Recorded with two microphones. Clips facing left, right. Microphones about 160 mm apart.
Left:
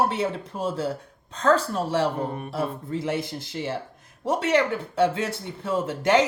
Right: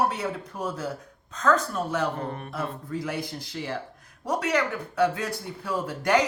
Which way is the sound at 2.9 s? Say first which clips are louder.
Left 3 dB; 25° left (ahead or behind).